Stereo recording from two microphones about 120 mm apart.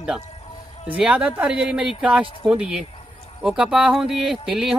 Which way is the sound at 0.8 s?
10° right (ahead or behind).